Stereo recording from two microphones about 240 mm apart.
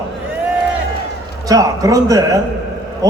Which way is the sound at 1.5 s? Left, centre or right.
Centre.